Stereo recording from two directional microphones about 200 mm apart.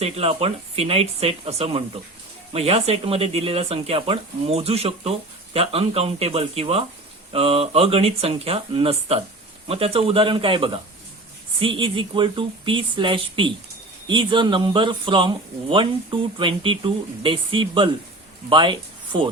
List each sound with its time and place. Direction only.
0.0 s speech: 30° right (ahead or behind)